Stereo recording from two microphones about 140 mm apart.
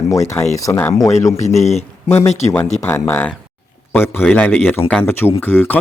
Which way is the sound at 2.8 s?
20° left (ahead or behind).